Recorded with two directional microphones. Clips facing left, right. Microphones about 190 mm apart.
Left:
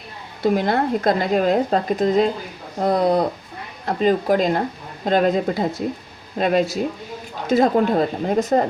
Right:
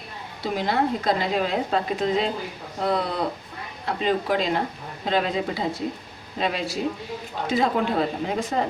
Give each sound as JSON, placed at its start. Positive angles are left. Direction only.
{"t": 0.4, "sound": "speech", "side_deg": 50}